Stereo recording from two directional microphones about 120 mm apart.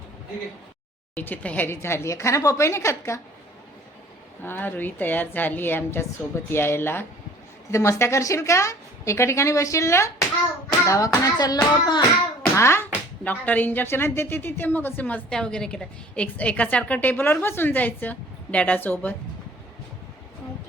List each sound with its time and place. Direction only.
1.1 s a woman's voice: 15° left (ahead or behind)
4.4 s a woman's voice: 15° left (ahead or behind); by 12.0 s 35° left (ahead or behind)
12.5 s speech: 20° left (ahead or behind)